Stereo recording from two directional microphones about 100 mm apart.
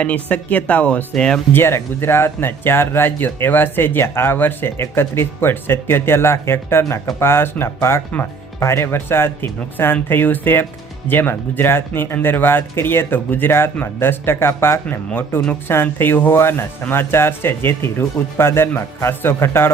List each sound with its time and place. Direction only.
0.0 s speech: 15° left (ahead or behind)
1.5 s speech: 25° left (ahead or behind)